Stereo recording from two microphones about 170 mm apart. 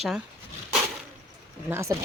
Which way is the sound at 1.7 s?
15° right (ahead or behind).